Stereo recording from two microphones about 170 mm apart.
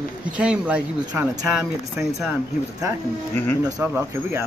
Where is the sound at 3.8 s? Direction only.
10° right (ahead or behind).